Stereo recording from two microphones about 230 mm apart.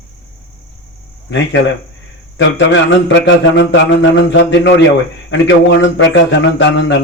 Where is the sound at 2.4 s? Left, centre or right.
Left.